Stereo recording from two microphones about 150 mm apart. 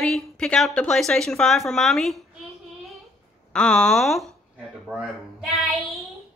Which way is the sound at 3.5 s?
5° left (ahead or behind).